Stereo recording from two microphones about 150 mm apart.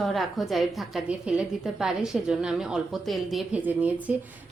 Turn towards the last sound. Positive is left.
turn(degrees=-10)  # may be behind; listen again after turning